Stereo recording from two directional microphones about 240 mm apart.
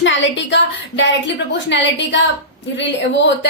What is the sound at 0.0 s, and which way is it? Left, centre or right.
A woman's voice, left.